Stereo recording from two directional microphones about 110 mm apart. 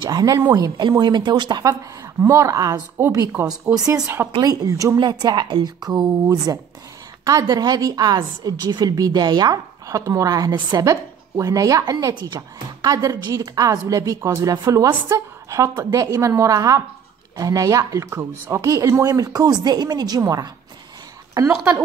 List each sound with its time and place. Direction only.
0.1 s a woman's voice: 35° right (ahead or behind)